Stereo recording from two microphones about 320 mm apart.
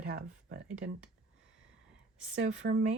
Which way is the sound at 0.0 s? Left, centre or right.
Right.